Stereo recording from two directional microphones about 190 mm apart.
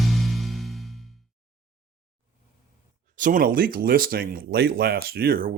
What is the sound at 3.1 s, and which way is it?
Speech, 45° right (ahead or behind).